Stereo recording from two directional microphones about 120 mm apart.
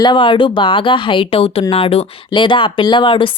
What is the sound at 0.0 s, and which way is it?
A woman's voice, 40° left (ahead or behind).